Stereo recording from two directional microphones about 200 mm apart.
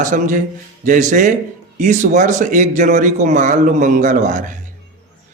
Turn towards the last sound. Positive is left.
turn(degrees=-40)  # may be behind; listen again after turning